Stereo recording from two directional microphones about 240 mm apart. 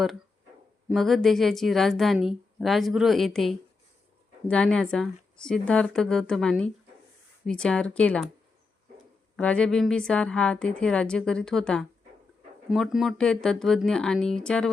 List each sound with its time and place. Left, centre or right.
0.9 s a woman's voice: centre
9.3 s a woman's voice: centre